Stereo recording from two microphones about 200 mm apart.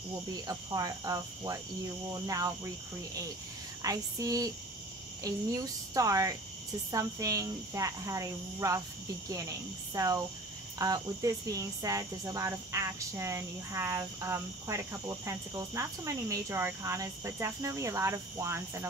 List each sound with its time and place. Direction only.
0.5 s speech: 20° right (ahead or behind)
3.8 s speech: 15° right (ahead or behind)